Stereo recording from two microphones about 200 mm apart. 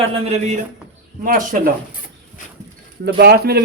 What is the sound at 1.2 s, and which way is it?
Speech, 45° right (ahead or behind).